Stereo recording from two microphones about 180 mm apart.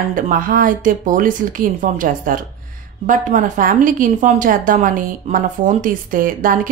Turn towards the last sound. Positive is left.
turn(degrees=-50)  # may be behind; listen again after turning